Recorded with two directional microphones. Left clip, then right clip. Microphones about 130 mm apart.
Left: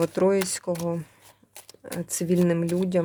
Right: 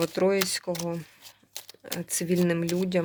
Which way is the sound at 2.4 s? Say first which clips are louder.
Left 3 dB; 20° left (ahead or behind).